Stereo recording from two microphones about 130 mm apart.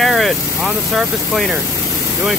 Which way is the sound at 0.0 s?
Centre (ahead or behind).